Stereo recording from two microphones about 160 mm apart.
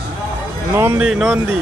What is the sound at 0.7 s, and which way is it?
Speech, 15° right (ahead or behind).